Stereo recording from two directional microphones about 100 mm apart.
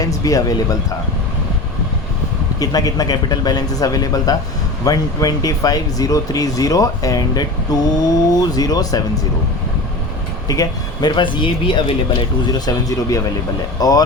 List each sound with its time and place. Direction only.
0.0 s speech: 35° left (ahead or behind)
2.6 s speech: 40° left (ahead or behind)
10.5 s speech: 40° left (ahead or behind); by 11.9 s 55° left (ahead or behind)
12.5 s speech: 40° left (ahead or behind)